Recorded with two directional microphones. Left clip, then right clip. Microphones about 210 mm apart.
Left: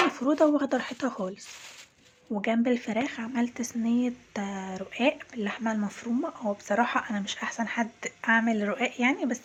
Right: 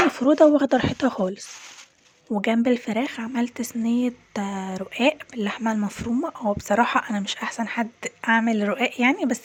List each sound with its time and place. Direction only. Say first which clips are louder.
0.1 s speech: right 7 dB; 35° right (ahead or behind)